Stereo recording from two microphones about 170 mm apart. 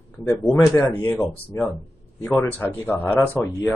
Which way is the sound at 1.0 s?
10° left (ahead or behind).